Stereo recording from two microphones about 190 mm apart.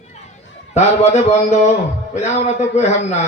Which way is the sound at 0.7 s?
35° left (ahead or behind).